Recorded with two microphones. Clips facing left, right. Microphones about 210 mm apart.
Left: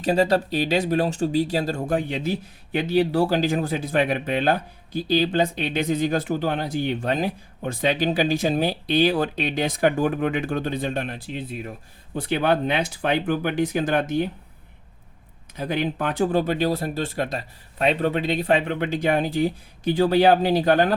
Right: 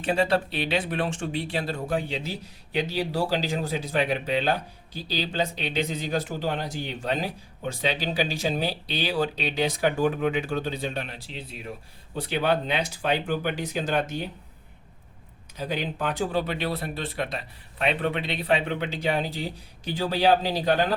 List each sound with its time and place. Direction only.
0.0 s speech: 40° left (ahead or behind)
15.5 s speech: 55° left (ahead or behind)